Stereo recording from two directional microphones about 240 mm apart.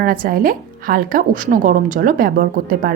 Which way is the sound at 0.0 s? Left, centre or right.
Right.